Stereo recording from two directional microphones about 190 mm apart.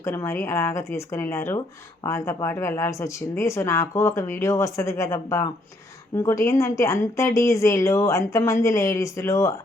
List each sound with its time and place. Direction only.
0.0 s speech: 15° left (ahead or behind)